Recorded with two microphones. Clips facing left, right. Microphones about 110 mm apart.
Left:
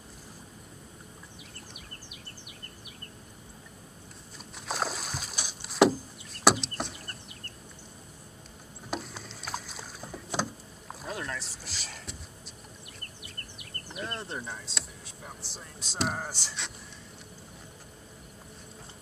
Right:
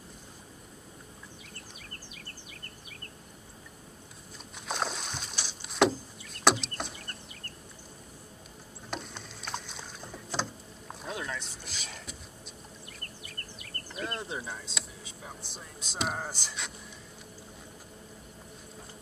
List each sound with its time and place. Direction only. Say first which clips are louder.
4.6 s rowboat: left 1 dB; centre (ahead or behind)
8.9 s boat: left 3 dB; 5° left (ahead or behind)
13.2 s insect: right 1 dB; 20° left (ahead or behind)
14.0 s speech: right 1 dB; centre (ahead or behind)